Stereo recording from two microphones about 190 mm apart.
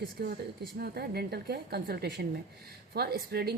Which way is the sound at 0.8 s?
55° right (ahead or behind).